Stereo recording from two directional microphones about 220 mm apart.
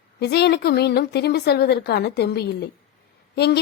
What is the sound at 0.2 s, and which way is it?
A woman's voice, 50° left (ahead or behind).